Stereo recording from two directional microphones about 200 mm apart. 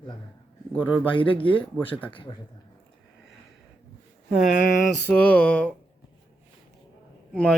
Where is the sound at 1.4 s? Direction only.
25° left (ahead or behind).